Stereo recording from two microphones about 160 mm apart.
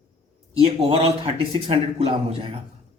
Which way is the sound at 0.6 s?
40° right (ahead or behind).